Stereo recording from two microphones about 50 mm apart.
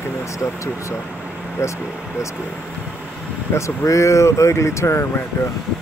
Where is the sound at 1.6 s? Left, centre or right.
Left.